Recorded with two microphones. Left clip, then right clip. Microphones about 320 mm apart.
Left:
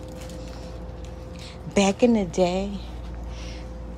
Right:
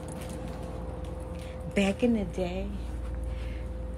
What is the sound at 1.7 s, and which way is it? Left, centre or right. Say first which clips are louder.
Speech: left 7 dB; centre.